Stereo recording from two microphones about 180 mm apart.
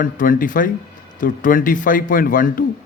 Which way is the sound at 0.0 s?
50° left (ahead or behind).